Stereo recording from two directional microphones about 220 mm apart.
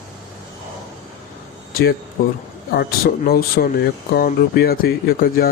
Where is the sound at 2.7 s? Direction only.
45° left (ahead or behind).